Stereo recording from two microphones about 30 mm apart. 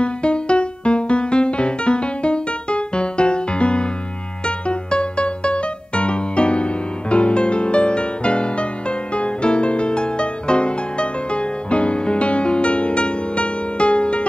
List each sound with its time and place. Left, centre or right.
0.0 s music: left